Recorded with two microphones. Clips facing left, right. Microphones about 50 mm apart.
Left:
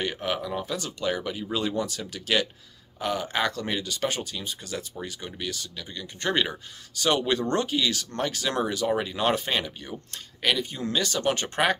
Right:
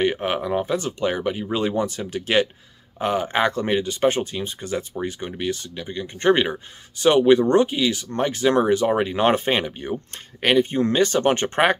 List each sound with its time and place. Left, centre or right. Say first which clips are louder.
0.0 s speech: right 7 dB; right